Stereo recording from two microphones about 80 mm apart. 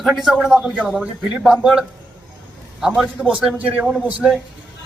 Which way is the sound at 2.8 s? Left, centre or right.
Centre.